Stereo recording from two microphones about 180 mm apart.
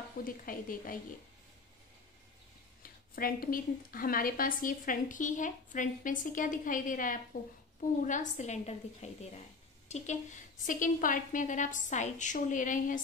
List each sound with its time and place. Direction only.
0.2 s a woman's voice: 50° left (ahead or behind)
2.8 s a woman's voice: 55° left (ahead or behind)